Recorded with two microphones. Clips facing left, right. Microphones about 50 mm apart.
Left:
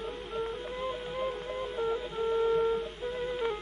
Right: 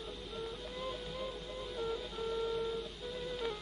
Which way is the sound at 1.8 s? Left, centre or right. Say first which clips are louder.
Left 7 dB; left.